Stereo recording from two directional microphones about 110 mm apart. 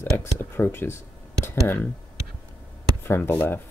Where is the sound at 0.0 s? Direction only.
20° left (ahead or behind).